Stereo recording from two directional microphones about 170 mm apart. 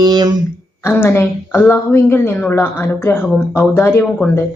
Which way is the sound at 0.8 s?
15° left (ahead or behind).